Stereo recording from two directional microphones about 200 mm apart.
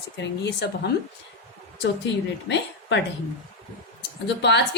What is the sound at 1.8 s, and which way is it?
A woman's voice, 60° left (ahead or behind).